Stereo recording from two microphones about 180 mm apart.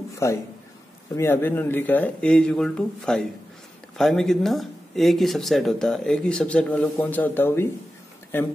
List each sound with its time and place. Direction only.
0.2 s speech: 15° left (ahead or behind)